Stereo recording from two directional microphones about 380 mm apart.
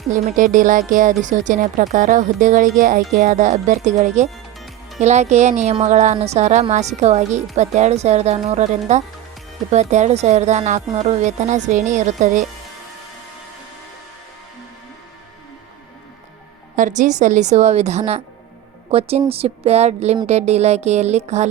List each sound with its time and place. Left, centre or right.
0.1 s a woman's voice: centre
9.7 s a woman's voice: centre
16.7 s a woman's voice: centre